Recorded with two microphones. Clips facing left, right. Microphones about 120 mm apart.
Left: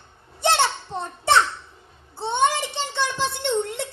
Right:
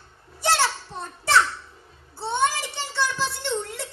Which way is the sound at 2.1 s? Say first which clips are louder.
Left 3 dB; 20° left (ahead or behind).